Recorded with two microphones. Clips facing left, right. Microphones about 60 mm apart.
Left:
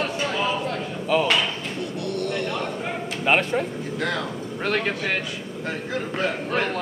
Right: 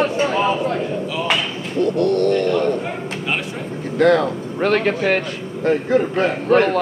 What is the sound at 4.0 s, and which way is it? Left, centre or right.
Speech, right.